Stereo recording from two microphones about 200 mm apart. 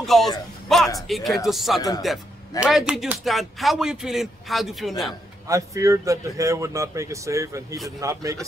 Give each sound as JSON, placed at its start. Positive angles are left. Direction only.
{"t": 0.0, "sound": "a sound", "side_deg": 0}
{"t": 1.0, "sound": "speech", "side_deg": 0}
{"t": 5.5, "sound": "speech", "side_deg": -15}